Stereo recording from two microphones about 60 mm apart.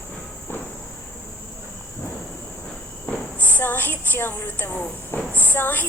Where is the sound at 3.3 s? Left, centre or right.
Left.